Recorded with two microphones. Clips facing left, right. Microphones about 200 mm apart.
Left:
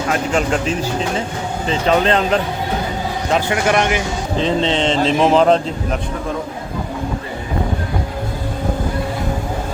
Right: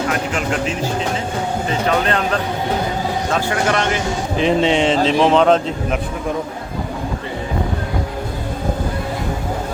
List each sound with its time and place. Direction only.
2.0 s speech: 25° left (ahead or behind)
4.4 s speech: 15° right (ahead or behind)